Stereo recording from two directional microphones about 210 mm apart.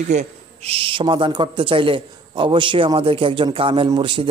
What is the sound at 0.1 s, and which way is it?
Speech, 30° right (ahead or behind).